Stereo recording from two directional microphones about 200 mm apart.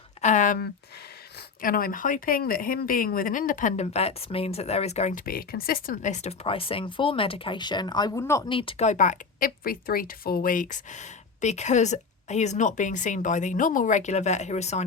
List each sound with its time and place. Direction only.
0.2 s a sound: 35° left (ahead or behind)
1.6 s a woman's voice: 45° left (ahead or behind); by 8.4 s 15° left (ahead or behind)
8.4 s a woman's voice: 25° left (ahead or behind)